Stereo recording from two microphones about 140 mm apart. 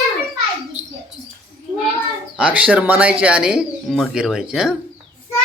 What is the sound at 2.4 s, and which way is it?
Speech, 10° right (ahead or behind).